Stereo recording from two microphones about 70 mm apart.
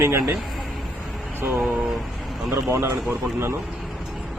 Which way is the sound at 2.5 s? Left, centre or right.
Right.